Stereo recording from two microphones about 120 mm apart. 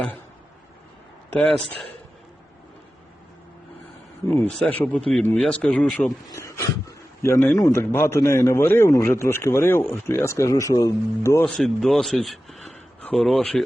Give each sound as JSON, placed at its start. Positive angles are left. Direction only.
{"t": 1.4, "sound": "speech", "side_deg": 10}
{"t": 4.3, "sound": "speech", "side_deg": 20}
{"t": 6.2, "sound": "speech", "side_deg": 25}
{"t": 11.4, "sound": "a man's voice", "side_deg": 5}